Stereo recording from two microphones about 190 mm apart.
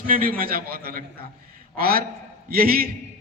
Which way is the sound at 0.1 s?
50° right (ahead or behind).